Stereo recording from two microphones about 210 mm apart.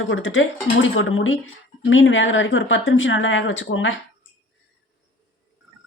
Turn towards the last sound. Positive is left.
turn(degrees=65)  # may be behind; listen again after turning